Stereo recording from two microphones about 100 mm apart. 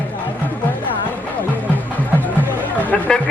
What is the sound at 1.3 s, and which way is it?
Music, 15° left (ahead or behind).